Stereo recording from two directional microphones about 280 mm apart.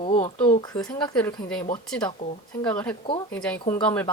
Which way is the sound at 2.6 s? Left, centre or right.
Centre.